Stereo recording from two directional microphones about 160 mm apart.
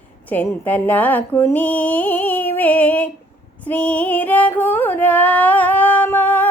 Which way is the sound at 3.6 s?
10° left (ahead or behind).